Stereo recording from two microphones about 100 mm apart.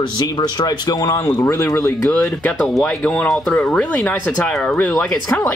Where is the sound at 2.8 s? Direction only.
10° left (ahead or behind).